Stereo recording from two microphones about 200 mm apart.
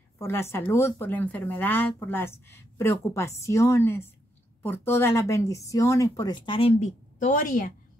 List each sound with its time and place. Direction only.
0.2 s speech: 10° left (ahead or behind); by 7.7 s 40° left (ahead or behind)